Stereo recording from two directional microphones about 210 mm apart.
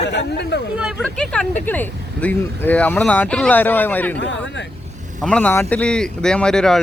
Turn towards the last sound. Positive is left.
turn(degrees=0)  # may be behind; listen again after turning